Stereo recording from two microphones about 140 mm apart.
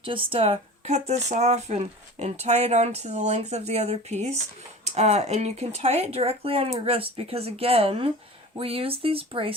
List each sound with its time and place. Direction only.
0.0 s speech: 40° right (ahead or behind)